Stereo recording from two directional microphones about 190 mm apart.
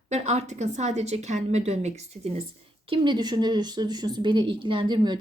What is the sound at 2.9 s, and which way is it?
A woman's voice, 25° right (ahead or behind).